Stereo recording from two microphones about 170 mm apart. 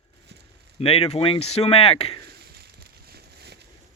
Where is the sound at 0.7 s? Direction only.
35° left (ahead or behind).